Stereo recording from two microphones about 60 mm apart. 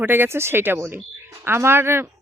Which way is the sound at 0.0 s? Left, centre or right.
Right.